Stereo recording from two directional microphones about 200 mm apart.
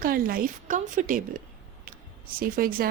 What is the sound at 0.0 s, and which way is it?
Speech, 45° right (ahead or behind).